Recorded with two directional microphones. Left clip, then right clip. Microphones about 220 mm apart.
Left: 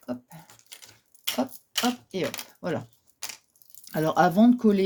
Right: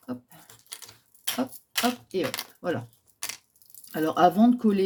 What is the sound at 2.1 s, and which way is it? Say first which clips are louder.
Speech: right 1 dB; 45° left (ahead or behind).